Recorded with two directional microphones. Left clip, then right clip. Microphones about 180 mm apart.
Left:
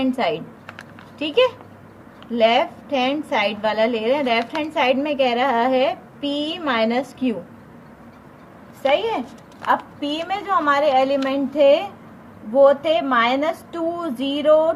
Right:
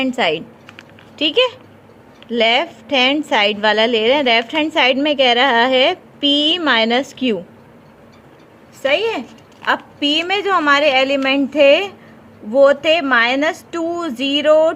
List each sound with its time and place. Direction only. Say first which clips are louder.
0.0 s a woman's voice: right 4 dB; 35° right (ahead or behind)
9.6 s a woman's voice: right 4 dB; 50° right (ahead or behind)